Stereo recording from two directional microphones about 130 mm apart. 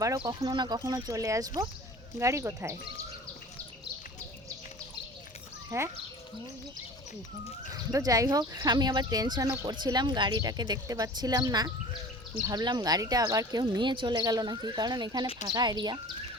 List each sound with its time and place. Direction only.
0.2 s speech: 30° right (ahead or behind)
5.7 s speech: 25° right (ahead or behind)
7.7 s speech: 25° right (ahead or behind)